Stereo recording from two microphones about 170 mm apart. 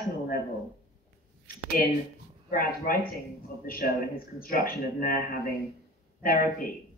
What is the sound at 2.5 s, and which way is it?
A woman's voice, 55° left (ahead or behind).